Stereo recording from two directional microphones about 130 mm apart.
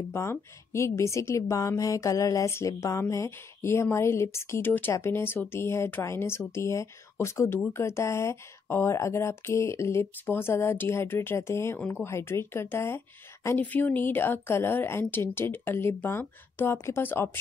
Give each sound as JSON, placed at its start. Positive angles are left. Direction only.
{"t": 0.1, "sound": "a woman's voice", "side_deg": 20}